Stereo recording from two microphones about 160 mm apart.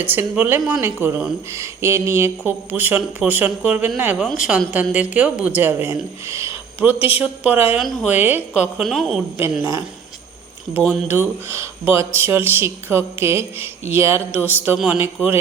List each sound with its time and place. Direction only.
0.0 s a woman's voice: 10° right (ahead or behind)
9.4 s speech: 20° right (ahead or behind)